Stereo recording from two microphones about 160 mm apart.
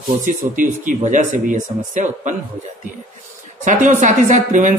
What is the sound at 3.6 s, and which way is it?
Speech, 50° right (ahead or behind).